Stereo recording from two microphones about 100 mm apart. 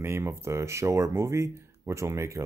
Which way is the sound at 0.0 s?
25° right (ahead or behind).